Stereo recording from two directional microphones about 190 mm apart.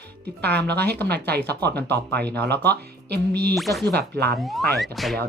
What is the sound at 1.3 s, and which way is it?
Speech, 60° right (ahead or behind).